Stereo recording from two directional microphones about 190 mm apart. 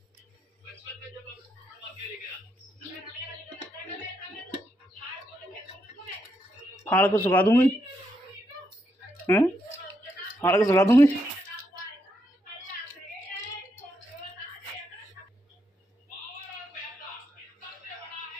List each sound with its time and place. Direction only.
6.8 s speech: 10° left (ahead or behind)
9.2 s speech: 15° left (ahead or behind)